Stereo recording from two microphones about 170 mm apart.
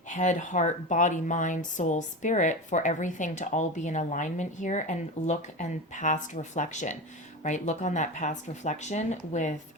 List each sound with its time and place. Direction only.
0.1 s speech: 45° left (ahead or behind)